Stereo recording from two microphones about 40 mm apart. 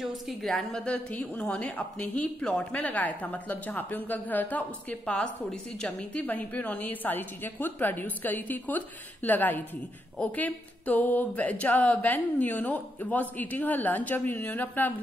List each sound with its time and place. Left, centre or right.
0.0 s a woman's voice: centre
0.6 s a woman's voice: centre
0.9 s a woman's voice: left
2.7 s speech: left
5.0 s a woman's voice: left
6.1 s speech: left